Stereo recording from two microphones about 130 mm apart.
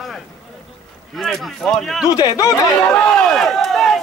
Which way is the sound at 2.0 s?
30° left (ahead or behind).